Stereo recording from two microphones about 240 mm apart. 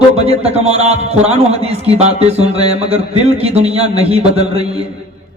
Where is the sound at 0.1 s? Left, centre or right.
Right.